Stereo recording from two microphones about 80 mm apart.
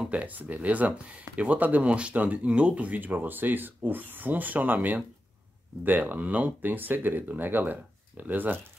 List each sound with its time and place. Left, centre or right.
0.0 s speech: centre